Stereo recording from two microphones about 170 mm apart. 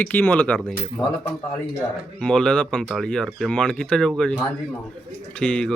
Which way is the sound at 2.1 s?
5° left (ahead or behind).